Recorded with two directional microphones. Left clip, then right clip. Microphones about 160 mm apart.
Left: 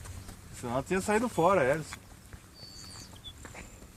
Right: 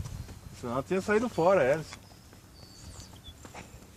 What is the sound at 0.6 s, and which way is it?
Speech, 55° left (ahead or behind).